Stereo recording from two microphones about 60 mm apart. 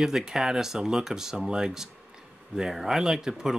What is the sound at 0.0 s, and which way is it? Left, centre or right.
Speech, centre.